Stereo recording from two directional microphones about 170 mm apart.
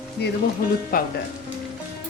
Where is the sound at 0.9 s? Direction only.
55° left (ahead or behind).